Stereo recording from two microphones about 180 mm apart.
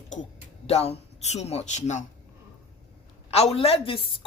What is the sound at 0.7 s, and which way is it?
Speech, 35° left (ahead or behind).